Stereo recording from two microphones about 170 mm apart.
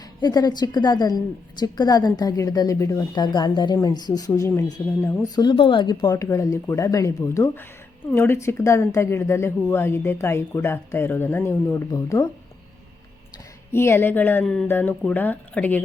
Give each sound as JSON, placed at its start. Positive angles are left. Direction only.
{"t": 0.2, "sound": "a woman's voice", "side_deg": 25}
{"t": 5.4, "sound": "a woman's voice", "side_deg": 30}
{"t": 13.7, "sound": "a woman's voice", "side_deg": 15}